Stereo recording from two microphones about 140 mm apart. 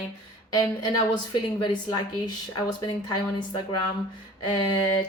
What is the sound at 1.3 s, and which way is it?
A woman's voice, 35° left (ahead or behind).